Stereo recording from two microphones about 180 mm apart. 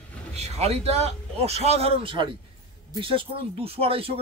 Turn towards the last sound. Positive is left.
turn(degrees=-30)  # may be behind; listen again after turning